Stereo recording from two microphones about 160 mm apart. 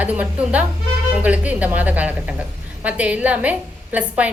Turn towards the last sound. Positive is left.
turn(degrees=-10)  # may be behind; listen again after turning